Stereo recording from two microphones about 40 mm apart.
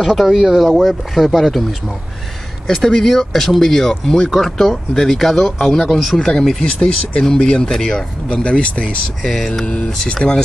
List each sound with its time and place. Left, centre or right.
0.0 s speech: centre
5.7 s speech: centre
9.2 s speech: centre
10.1 s speech: centre